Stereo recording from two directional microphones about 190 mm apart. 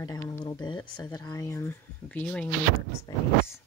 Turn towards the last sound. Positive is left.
turn(degrees=20)  # may be behind; listen again after turning